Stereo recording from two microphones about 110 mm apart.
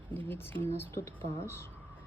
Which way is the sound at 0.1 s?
20° left (ahead or behind).